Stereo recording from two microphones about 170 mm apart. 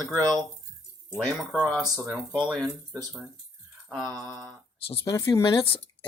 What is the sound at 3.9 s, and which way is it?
Mantra, 5° left (ahead or behind).